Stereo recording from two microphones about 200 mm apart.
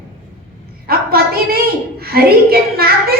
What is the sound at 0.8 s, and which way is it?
A woman's voice, 50° right (ahead or behind).